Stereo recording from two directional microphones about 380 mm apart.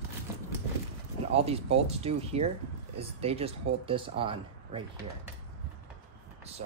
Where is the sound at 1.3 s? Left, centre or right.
Centre.